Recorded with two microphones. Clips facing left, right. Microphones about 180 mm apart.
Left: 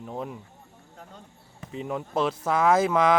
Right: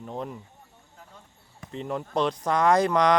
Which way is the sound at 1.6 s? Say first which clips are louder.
Even; 5° left (ahead or behind).